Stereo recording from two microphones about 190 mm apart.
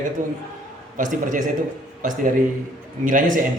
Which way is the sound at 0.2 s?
45° right (ahead or behind).